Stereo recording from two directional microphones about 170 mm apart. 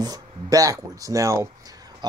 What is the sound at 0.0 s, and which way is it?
Speech, 20° right (ahead or behind).